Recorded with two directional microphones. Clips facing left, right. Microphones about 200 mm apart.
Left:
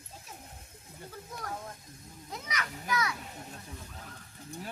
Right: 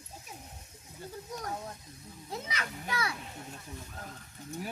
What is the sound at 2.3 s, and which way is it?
Speech, 30° right (ahead or behind).